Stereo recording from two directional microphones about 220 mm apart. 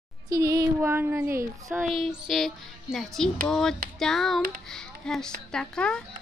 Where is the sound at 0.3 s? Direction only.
15° right (ahead or behind).